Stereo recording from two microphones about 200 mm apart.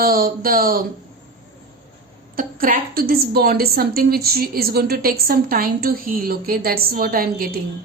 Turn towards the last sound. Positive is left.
turn(degrees=-45)  # may be behind; listen again after turning